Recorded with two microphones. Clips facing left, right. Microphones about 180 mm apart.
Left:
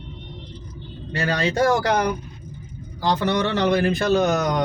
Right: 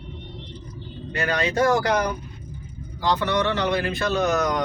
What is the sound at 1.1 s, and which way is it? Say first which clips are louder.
Speech: left 1 dB; 30° left (ahead or behind).